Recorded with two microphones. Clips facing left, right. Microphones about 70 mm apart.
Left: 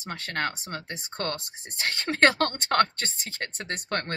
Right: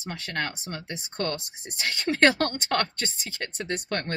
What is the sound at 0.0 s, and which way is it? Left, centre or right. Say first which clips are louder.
Speech: left 1 dB; left.